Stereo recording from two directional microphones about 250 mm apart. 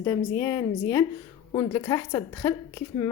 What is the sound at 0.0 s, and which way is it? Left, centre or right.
A woman's voice, centre.